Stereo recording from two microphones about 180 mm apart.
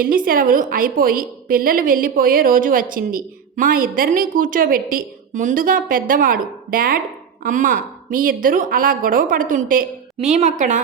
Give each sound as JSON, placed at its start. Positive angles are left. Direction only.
{"t": 0.0, "sound": "a woman's voice", "side_deg": -50}